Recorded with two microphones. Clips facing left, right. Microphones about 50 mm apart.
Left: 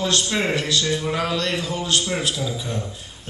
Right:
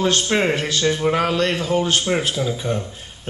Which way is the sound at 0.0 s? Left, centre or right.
Right.